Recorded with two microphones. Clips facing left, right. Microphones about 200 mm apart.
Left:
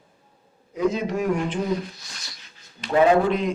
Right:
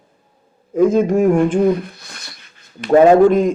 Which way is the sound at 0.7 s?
50° right (ahead or behind).